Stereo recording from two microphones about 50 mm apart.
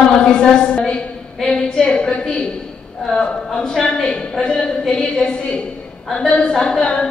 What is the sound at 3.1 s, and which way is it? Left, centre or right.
A woman's voice, centre.